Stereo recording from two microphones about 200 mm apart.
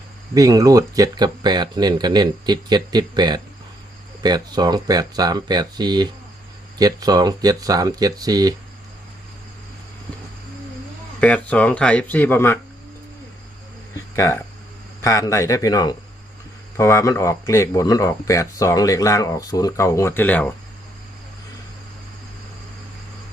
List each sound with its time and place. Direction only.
0.3 s speech: 15° right (ahead or behind)
11.2 s speech: 5° left (ahead or behind)
14.2 s speech: 15° left (ahead or behind)